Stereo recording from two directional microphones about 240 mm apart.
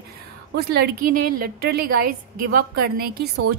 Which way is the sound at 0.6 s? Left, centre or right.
Right.